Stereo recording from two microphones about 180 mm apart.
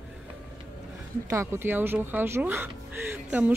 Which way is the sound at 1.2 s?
15° right (ahead or behind).